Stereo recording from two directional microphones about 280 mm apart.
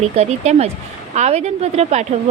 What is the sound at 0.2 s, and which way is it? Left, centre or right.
A woman's voice, right.